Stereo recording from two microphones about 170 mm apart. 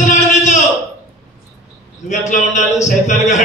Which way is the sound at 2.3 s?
45° left (ahead or behind).